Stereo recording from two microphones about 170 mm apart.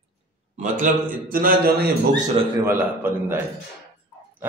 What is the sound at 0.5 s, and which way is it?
A man's voice, 50° right (ahead or behind).